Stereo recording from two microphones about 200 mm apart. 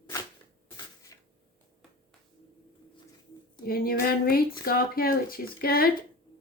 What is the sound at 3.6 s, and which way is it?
Speech, 50° left (ahead or behind).